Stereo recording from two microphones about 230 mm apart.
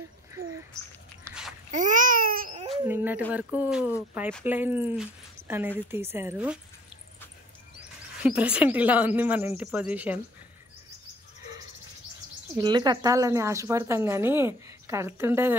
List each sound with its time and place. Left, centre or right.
0.3 s a sound: centre
1.7 s baby cry: right
2.8 s speech: centre
8.2 s speech: centre
12.5 s speech: centre